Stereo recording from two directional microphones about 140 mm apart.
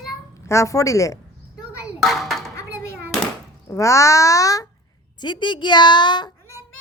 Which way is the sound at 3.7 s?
20° left (ahead or behind).